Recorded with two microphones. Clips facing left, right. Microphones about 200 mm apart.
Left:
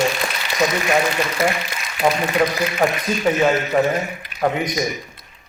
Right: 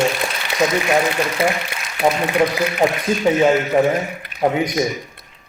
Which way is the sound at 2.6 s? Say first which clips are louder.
Right 2 dB; 15° right (ahead or behind).